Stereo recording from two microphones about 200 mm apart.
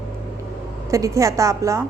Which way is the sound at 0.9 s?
15° right (ahead or behind).